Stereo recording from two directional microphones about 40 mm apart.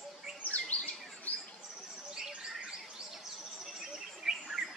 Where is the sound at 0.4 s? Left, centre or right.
Left.